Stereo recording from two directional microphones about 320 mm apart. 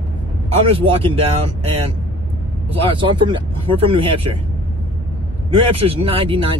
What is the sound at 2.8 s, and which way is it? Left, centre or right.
Speech, centre.